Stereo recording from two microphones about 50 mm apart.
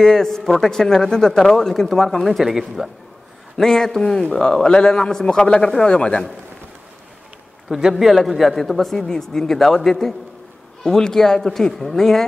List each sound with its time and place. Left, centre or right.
0.0 s a man's voice: centre
3.5 s a man's voice: centre
7.7 s a man's voice: centre